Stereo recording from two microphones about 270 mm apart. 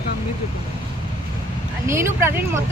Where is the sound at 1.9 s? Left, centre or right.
Centre.